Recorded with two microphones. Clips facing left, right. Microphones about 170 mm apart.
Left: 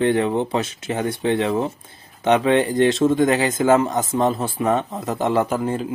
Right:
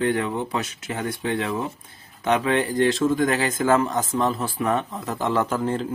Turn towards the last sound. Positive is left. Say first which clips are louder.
# left 2 dB
turn(degrees=10)  # may be behind; listen again after turning